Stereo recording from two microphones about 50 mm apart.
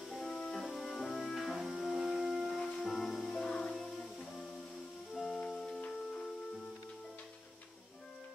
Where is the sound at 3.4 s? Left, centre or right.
Centre.